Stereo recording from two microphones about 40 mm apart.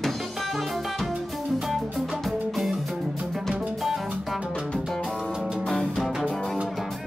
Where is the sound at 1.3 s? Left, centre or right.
Centre.